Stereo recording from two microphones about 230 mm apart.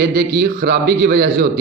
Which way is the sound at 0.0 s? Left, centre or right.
Right.